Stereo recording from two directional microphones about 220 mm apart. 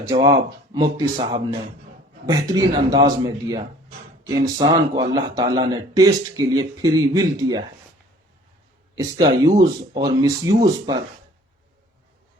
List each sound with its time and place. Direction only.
0.1 s a man's voice: 20° right (ahead or behind)
9.0 s speech: 15° right (ahead or behind)